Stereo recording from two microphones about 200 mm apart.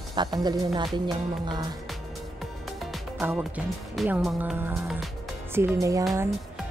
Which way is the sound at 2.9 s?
5° right (ahead or behind).